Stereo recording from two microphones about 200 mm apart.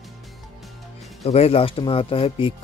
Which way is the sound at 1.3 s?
30° left (ahead or behind).